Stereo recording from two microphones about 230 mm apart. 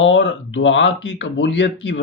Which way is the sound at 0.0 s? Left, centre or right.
Left.